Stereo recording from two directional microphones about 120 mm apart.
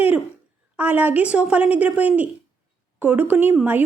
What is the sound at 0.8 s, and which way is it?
Speech, 15° right (ahead or behind).